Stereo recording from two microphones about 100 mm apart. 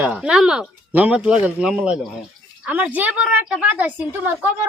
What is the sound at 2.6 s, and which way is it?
A woman's voice, 15° right (ahead or behind).